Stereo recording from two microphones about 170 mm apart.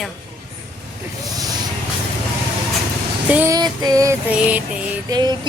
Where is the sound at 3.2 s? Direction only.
10° right (ahead or behind).